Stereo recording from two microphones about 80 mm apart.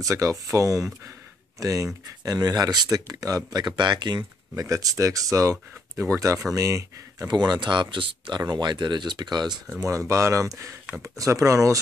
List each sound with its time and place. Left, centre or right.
0.0 s speech: right
3.7 s speech: right
4.6 s speech: right
7.2 s speech: right
8.5 s speech: right
9.8 s speech: right